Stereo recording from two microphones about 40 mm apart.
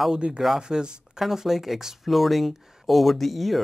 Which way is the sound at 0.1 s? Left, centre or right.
Right.